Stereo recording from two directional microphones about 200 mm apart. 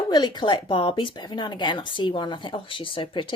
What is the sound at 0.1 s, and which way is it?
Speech, 20° left (ahead or behind).